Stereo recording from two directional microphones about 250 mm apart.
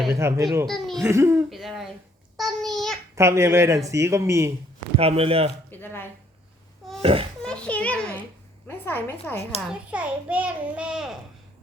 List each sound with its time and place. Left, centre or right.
0.0 s a child's voice: centre
0.7 s speech: centre
1.0 s speech: centre
1.5 s a child's voice: centre
2.3 s a sound: centre
3.2 s speech: centre
4.9 s speech: right
5.7 s speech: centre
7.0 s speech: right
7.4 s a sound: centre
8.6 s a woman's voice: centre
9.6 s a child's voice: centre